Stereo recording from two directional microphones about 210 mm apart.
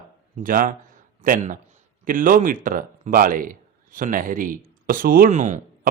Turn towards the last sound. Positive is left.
turn(degrees=-35)  # may be behind; listen again after turning